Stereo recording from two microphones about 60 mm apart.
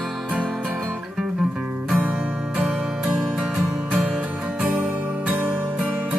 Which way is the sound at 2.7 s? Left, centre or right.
Centre.